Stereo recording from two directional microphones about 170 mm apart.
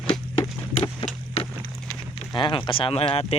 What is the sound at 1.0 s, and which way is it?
Wood, 30° left (ahead or behind).